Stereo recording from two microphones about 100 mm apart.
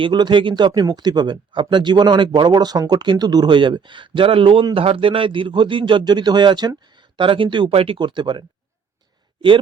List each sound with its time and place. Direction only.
0.0 s speech: 50° right (ahead or behind)
7.7 s speech: 75° right (ahead or behind)
7.9 s speech: 50° right (ahead or behind)